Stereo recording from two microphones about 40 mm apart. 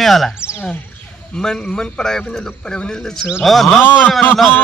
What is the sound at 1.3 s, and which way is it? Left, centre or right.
A man's voice, centre.